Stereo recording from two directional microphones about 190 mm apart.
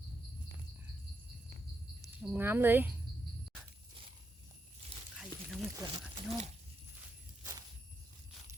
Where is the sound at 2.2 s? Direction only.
10° right (ahead or behind).